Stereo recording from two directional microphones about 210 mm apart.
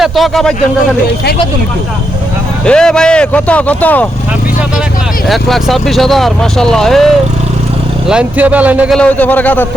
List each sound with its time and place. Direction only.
0.0 s speech: centre (ahead or behind)
2.6 s speech: 5° left (ahead or behind)
5.3 s speech: centre (ahead or behind)
9.0 s speech: 5° left (ahead or behind)